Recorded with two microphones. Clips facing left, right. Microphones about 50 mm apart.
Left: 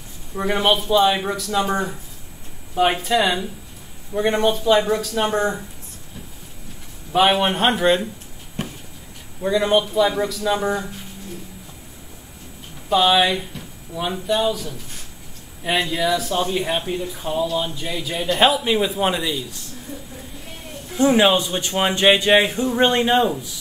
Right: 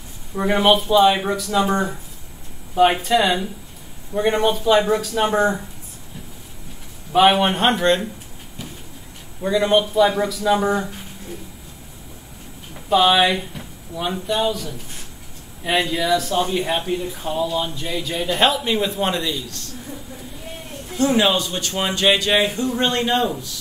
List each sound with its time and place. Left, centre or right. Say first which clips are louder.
0.4 s speech: right 3 dB; centre
7.1 s speech: right 2 dB; centre
8.6 s a sound: left 6 dB; left
9.4 s speech: right 1 dB; centre
12.9 s speech: right 1 dB; centre
20.9 s speech: left 2 dB; centre